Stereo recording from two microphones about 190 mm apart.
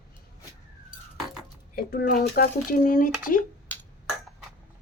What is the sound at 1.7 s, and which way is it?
Speech, 50° left (ahead or behind).